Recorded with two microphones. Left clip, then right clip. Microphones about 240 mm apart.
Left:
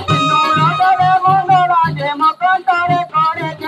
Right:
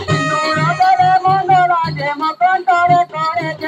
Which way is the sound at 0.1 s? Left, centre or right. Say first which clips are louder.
Left 4 dB; left.